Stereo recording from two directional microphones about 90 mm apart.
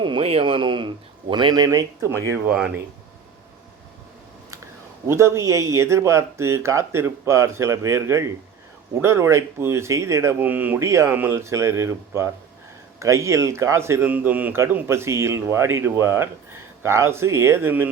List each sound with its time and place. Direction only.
0.0 s speech: 80° right
1.3 s speech: 55° right (ahead or behind)
1.6 s speech: 35° right (ahead or behind)
2.5 s speech: 10° right (ahead or behind)
5.0 s speech: 30° right (ahead or behind)
10.4 s speech: 20° right (ahead or behind)
10.8 s speech: 30° right (ahead or behind)
14.1 s speech: 15° right (ahead or behind)
14.8 s speech: 30° right (ahead or behind)